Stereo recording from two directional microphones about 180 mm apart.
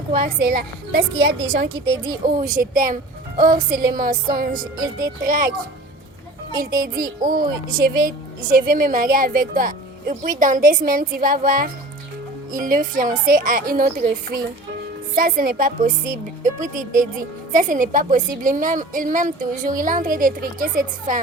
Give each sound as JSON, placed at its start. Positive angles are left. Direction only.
{"t": 0.2, "sound": "a woman's voice", "side_deg": -55}
{"t": 1.4, "sound": "a woman's voice", "side_deg": -25}
{"t": 2.2, "sound": "a woman's voice", "side_deg": -50}
{"t": 6.7, "sound": "a woman's voice", "side_deg": -50}
{"t": 6.9, "sound": "a woman's voice", "side_deg": -20}
{"t": 7.7, "sound": "a woman's voice", "side_deg": -50}